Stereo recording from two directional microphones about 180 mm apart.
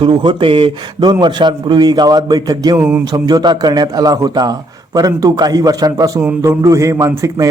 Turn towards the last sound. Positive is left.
turn(degrees=-15)  # may be behind; listen again after turning